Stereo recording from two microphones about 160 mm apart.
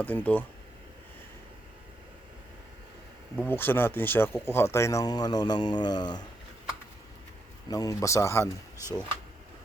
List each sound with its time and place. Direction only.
0.0 s speech: 10° left (ahead or behind)
3.3 s speech: 10° left (ahead or behind)
7.7 s speech: 20° left (ahead or behind)